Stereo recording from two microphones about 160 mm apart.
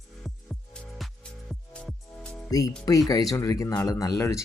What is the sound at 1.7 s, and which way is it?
Music, 5° left (ahead or behind).